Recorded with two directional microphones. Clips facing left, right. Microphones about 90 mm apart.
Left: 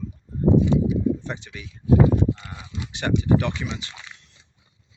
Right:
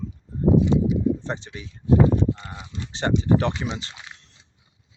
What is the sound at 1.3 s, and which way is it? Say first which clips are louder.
Speech: right 2 dB; 30° right (ahead or behind).